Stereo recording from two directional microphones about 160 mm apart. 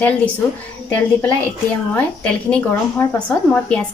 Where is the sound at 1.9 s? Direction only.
10° left (ahead or behind).